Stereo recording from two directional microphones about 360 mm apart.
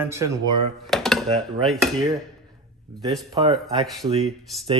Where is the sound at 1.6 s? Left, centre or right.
Centre.